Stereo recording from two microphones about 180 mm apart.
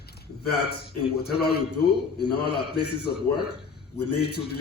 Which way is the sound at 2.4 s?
65° left (ahead or behind).